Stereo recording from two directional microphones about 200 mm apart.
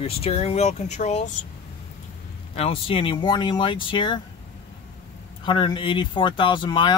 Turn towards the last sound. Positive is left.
turn(degrees=25)  # may be behind; listen again after turning